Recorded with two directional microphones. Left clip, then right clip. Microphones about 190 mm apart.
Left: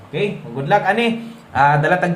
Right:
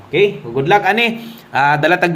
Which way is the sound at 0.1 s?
40° right (ahead or behind).